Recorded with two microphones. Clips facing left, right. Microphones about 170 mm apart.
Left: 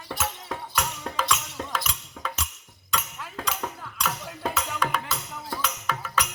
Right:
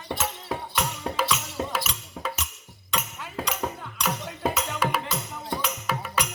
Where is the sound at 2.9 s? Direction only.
20° right (ahead or behind).